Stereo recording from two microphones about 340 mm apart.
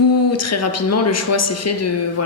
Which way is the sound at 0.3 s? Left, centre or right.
Left.